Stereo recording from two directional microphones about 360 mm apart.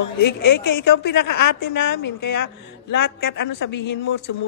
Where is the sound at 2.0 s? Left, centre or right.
Left.